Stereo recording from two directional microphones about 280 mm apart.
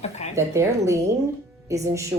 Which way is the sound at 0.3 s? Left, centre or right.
Centre.